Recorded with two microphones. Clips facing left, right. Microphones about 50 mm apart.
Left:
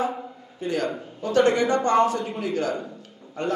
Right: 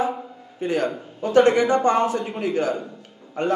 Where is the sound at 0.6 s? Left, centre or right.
Right.